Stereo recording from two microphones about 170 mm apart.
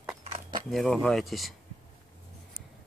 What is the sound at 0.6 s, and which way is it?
Speech, centre (ahead or behind).